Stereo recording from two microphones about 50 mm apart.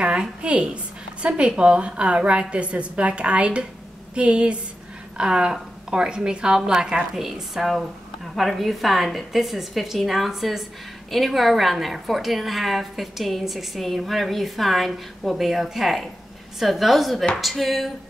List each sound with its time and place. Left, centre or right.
0.0 s a woman's voice: right; by 17.9 s centre